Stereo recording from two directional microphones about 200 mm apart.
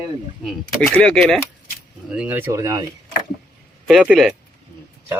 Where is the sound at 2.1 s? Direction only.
10° right (ahead or behind).